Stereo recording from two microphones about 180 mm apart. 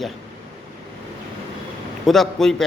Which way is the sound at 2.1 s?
Centre (ahead or behind).